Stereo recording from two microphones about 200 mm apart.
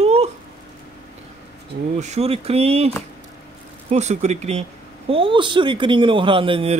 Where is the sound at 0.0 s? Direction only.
30° right (ahead or behind).